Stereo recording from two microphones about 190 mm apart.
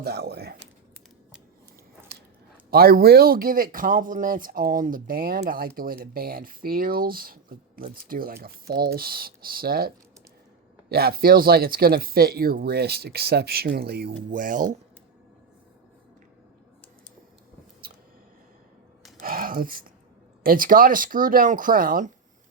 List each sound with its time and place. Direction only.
0.0 s speech: 60° right (ahead or behind)
2.6 s speech: 50° right (ahead or behind)
19.2 s a sound: 50° right (ahead or behind)
20.4 s speech: 50° right (ahead or behind)